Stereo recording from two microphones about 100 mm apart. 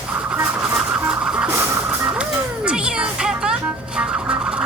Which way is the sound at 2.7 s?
10° right (ahead or behind).